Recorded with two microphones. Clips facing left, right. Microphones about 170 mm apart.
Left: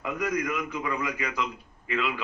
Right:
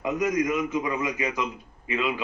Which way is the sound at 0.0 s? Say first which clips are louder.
Right 4 dB; 20° right (ahead or behind).